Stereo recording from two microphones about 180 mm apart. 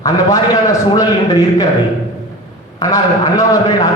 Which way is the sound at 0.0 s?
20° left (ahead or behind).